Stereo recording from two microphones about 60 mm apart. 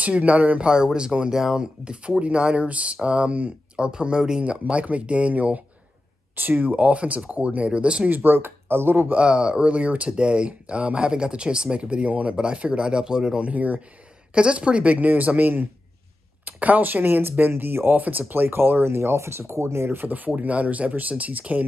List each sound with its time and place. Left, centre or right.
0.0 s a woman's voice: right
0.7 s speech: centre
4.5 s a woman's voice: right
8.1 s speech: right
9.1 s speech: centre
13.5 s a woman's voice: right